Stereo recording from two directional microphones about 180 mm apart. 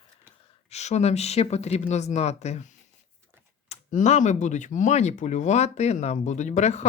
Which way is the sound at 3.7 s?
40° left (ahead or behind).